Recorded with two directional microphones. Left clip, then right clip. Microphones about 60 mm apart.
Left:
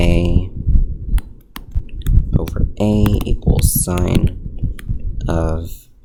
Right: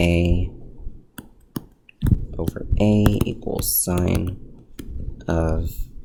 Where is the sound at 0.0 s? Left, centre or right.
Left.